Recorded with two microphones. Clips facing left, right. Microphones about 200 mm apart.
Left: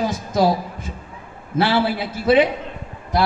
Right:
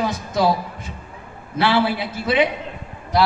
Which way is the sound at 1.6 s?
45° left (ahead or behind).